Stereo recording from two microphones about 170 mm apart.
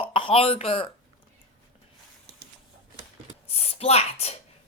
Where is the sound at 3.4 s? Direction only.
35° left (ahead or behind).